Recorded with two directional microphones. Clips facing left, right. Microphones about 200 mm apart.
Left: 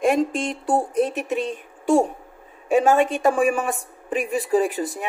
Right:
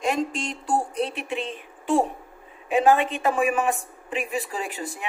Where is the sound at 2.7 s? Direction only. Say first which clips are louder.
Left 2 dB; 45° left (ahead or behind).